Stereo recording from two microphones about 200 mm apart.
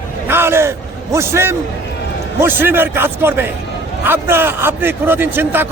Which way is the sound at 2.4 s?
10° right (ahead or behind).